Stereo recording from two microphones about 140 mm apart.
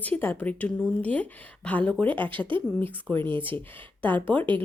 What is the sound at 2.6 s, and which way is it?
Speech, 15° left (ahead or behind).